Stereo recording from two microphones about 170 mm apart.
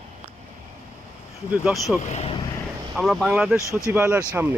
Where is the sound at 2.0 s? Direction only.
40° left (ahead or behind).